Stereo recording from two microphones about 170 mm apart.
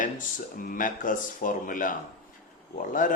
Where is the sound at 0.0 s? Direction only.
50° left (ahead or behind).